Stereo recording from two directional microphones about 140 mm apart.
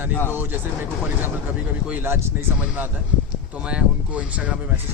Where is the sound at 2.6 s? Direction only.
10° right (ahead or behind).